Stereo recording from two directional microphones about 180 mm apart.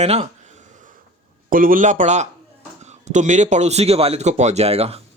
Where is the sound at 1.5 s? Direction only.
50° right (ahead or behind).